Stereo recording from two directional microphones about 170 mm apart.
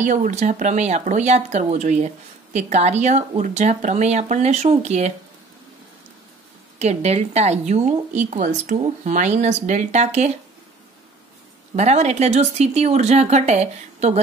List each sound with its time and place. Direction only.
0.0 s speech: 45° right (ahead or behind)
6.8 s speech: 40° right (ahead or behind)
11.7 s speech: 40° right (ahead or behind)